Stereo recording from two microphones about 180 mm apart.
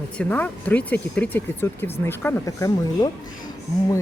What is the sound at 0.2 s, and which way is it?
A woman's voice, 10° left (ahead or behind).